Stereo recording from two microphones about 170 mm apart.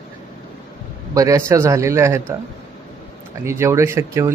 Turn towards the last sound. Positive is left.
turn(degrees=-15)  # may be behind; listen again after turning